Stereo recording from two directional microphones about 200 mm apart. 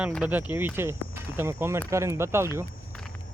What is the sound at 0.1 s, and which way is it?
Speech, 5° right (ahead or behind).